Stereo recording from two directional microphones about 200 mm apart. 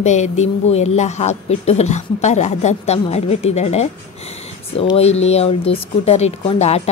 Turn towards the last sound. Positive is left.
turn(degrees=30)  # may be behind; listen again after turning